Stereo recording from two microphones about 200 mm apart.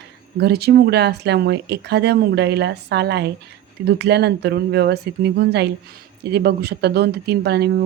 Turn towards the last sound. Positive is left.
turn(degrees=-55)  # may be behind; listen again after turning